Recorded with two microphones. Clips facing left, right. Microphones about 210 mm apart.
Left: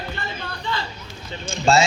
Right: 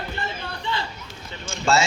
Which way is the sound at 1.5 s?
15° left (ahead or behind).